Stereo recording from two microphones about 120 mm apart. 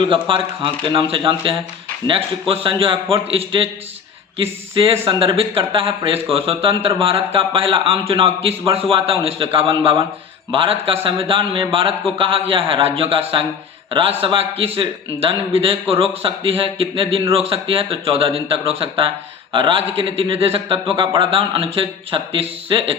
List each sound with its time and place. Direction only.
0.0 s a man's voice: 45° right (ahead or behind)